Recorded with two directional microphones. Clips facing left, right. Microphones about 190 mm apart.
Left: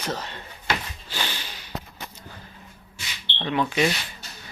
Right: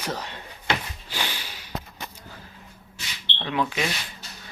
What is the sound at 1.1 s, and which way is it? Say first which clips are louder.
Snort: even; 10° right (ahead or behind).